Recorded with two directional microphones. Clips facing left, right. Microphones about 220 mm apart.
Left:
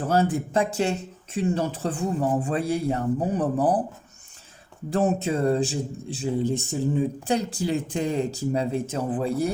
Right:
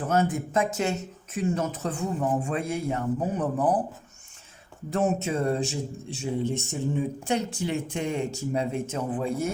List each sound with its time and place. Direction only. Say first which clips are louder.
0.1 s a man's voice: left 2 dB; 35° left (ahead or behind)
4.9 s a man's voice: left 2 dB; 35° left (ahead or behind)